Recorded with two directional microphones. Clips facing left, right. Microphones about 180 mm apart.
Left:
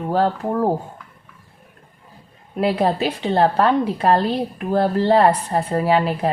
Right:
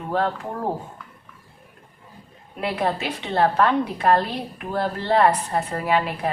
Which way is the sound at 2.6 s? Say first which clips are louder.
Left 6 dB; 35° left (ahead or behind).